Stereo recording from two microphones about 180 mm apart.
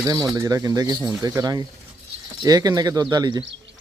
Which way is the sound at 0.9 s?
Centre (ahead or behind).